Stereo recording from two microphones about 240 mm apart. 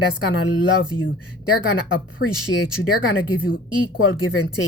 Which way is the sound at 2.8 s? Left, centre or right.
Left.